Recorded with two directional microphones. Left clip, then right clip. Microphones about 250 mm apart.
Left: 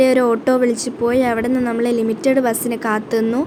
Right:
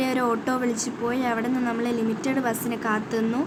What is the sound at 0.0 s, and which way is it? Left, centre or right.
A woman's voice, centre.